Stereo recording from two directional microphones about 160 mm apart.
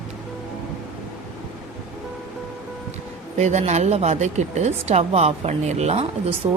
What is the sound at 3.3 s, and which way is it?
A woman's voice, 45° right (ahead or behind).